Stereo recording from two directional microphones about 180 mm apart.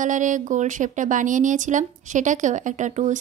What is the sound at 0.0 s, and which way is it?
Speech, 45° right (ahead or behind).